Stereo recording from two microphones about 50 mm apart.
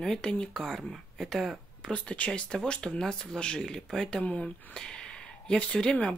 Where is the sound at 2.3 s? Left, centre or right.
Centre.